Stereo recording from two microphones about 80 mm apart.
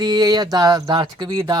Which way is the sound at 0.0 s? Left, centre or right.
Right.